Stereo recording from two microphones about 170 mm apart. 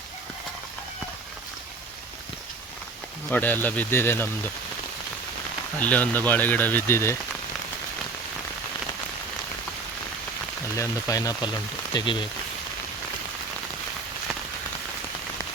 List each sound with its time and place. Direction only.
3.2 s speech: 10° left (ahead or behind)
5.8 s speech: 10° left (ahead or behind)
10.8 s speech: 20° left (ahead or behind)